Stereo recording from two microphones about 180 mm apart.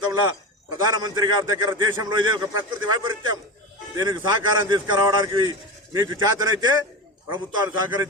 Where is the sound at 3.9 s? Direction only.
20° right (ahead or behind).